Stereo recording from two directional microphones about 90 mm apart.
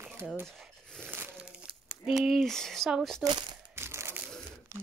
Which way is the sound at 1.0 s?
25° right (ahead or behind).